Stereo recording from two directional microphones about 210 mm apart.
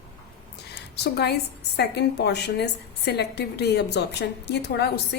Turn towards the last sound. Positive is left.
turn(degrees=50)  # may be behind; listen again after turning